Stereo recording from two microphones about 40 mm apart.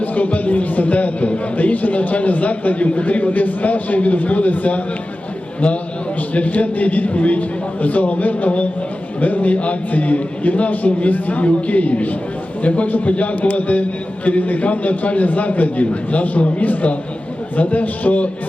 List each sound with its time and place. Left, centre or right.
0.0 s music: left
0.3 s a man's voice: left
6.3 s a man's voice: left